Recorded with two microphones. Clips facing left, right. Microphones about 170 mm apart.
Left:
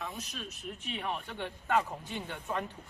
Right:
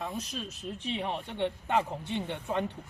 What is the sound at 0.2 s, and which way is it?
Speech, 35° right (ahead or behind).